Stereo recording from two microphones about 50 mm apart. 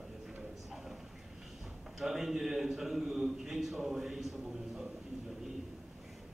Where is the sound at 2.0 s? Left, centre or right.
Centre.